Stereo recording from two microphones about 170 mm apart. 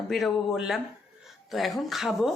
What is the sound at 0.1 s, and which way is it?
Speech, centre (ahead or behind).